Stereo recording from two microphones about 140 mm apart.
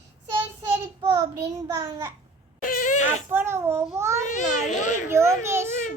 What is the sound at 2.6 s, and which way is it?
Speech, 80° left.